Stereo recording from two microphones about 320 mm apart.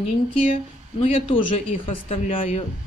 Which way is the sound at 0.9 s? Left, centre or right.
Centre.